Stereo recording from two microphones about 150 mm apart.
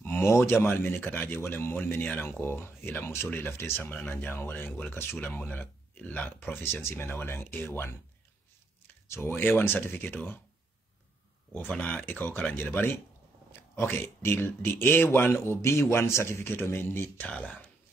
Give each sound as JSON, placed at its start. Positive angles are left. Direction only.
{"t": 0.0, "sound": "speech", "side_deg": 15}
{"t": 9.0, "sound": "speech", "side_deg": 15}
{"t": 11.5, "sound": "speech", "side_deg": 10}